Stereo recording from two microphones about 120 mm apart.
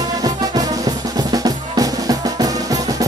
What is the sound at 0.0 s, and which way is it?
Music, 30° right (ahead or behind).